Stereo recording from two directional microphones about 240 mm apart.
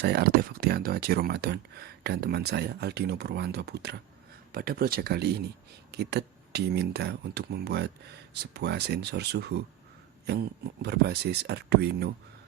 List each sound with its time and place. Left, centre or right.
0.0 s speech: right
10.8 s speech: right